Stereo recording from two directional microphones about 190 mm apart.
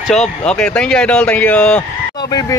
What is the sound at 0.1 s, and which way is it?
Speech, 5° left (ahead or behind).